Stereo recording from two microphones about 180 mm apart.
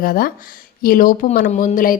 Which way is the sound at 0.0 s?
55° left (ahead or behind).